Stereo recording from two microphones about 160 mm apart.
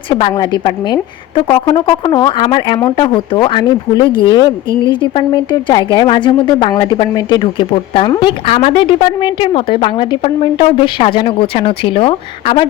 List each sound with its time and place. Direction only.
0.1 s a woman's voice: 30° left (ahead or behind)